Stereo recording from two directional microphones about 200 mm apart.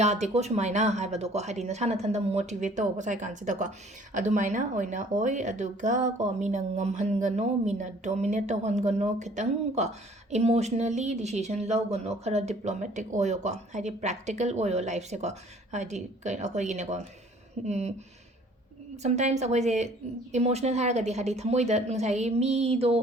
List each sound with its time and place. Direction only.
0.0 s speech: 35° right (ahead or behind)
19.0 s speech: 35° right (ahead or behind)